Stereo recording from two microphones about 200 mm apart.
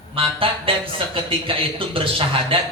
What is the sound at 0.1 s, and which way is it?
A man's voice, 25° right (ahead or behind).